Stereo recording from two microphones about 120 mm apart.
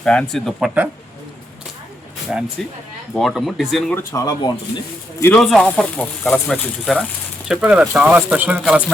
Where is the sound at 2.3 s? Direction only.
10° right (ahead or behind).